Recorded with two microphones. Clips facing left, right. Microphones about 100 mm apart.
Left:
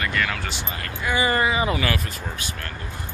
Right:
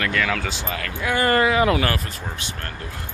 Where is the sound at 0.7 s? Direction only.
90° right.